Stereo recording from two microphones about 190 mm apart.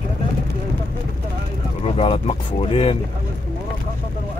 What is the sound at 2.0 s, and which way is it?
Speech, 30° left (ahead or behind).